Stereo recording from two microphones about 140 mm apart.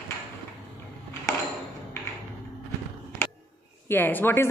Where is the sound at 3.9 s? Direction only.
15° left (ahead or behind).